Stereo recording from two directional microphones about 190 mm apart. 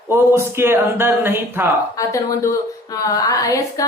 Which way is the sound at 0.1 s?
15° right (ahead or behind).